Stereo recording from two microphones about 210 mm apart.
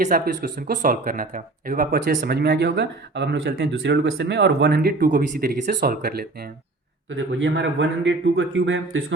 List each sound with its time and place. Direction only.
0.0 s speech: 40° right (ahead or behind)
7.2 s speech: 65° right (ahead or behind)